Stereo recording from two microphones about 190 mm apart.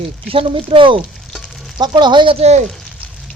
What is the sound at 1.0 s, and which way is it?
Frying, centre (ahead or behind).